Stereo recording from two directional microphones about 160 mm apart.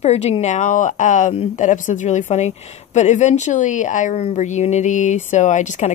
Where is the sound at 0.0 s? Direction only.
40° left (ahead or behind).